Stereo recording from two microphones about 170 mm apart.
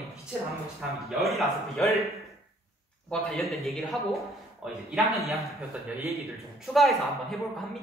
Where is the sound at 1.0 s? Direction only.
Centre (ahead or behind).